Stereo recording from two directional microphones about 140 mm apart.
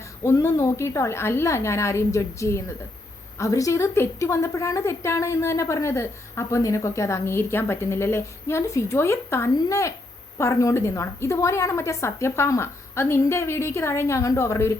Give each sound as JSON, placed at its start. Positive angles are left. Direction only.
{"t": 0.2, "sound": "a woman's voice", "side_deg": 20}